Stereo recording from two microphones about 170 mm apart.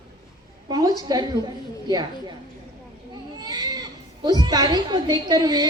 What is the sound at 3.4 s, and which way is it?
A woman's voice, 25° right (ahead or behind).